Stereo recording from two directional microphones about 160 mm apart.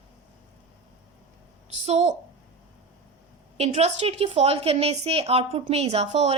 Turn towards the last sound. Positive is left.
turn(degrees=-40)  # may be behind; listen again after turning